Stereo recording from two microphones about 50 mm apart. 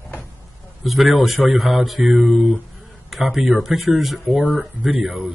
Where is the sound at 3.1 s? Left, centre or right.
Centre.